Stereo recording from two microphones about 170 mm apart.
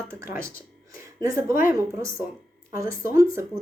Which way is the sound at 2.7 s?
15° right (ahead or behind).